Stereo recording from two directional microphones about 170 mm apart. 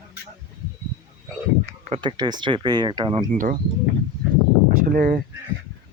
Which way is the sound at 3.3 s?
50° right (ahead or behind).